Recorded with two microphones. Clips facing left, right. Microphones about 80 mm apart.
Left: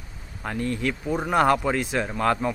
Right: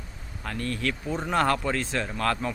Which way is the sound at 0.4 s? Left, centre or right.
Centre.